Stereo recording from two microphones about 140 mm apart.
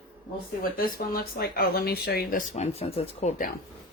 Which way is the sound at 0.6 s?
90° left.